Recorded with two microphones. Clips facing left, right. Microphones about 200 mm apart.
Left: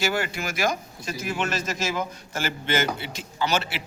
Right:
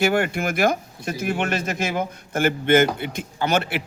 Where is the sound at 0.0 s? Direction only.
60° right (ahead or behind).